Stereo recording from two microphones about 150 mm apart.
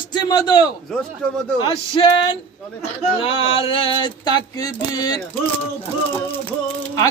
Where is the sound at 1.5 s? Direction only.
40° left (ahead or behind).